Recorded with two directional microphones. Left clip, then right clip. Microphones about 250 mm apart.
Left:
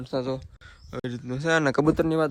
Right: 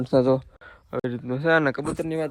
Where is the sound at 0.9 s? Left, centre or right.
Centre.